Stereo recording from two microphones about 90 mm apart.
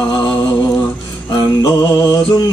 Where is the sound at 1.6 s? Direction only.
40° left (ahead or behind).